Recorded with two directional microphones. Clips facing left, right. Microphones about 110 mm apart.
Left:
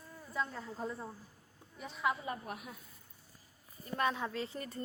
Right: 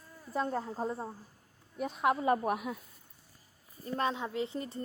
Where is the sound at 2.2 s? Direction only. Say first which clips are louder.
Right 12 dB; 75° right (ahead or behind).